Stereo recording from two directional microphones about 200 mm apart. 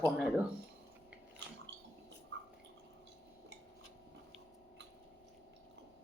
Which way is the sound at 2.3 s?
60° right (ahead or behind).